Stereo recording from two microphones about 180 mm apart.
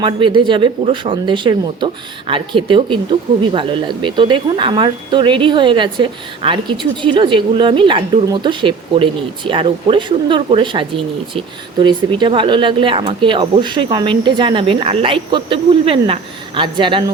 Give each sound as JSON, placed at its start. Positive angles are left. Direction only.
{"t": 0.0, "sound": "speech", "side_deg": -25}